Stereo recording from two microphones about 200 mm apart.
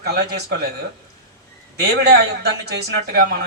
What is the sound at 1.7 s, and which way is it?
Speech, 55° right (ahead or behind).